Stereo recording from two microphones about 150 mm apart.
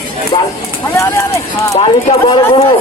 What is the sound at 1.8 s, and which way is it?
Speech, 35° left (ahead or behind).